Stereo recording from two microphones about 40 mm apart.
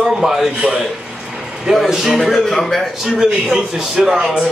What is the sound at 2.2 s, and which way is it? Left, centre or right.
Speech, centre.